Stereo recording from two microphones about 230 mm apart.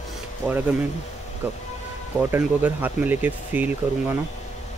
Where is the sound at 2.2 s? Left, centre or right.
Centre.